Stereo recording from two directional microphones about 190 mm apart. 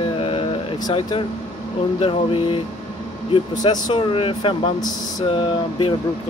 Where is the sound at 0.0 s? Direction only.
30° left (ahead or behind).